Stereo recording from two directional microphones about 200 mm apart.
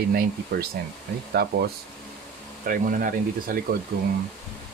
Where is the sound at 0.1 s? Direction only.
50° right (ahead or behind).